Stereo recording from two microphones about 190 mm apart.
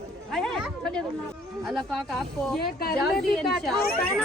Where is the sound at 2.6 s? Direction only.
50° left (ahead or behind).